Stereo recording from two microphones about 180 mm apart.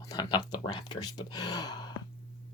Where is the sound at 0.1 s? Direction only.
25° left (ahead or behind).